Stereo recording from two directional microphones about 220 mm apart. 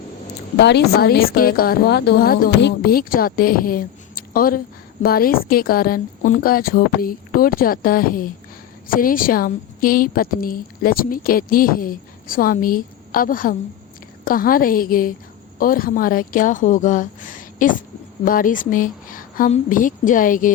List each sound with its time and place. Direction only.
0.5 s a woman's voice: 50° left (ahead or behind)